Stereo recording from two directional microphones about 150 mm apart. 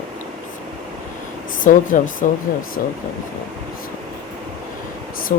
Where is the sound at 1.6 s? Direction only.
65° left (ahead or behind).